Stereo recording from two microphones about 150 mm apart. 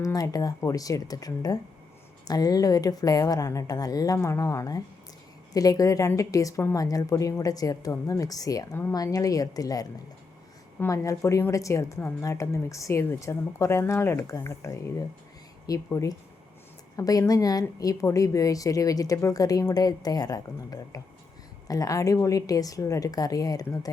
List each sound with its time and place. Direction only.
0.0 s a woman's voice: 25° left (ahead or behind)